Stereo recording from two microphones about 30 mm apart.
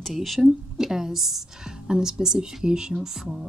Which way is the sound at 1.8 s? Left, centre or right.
Right.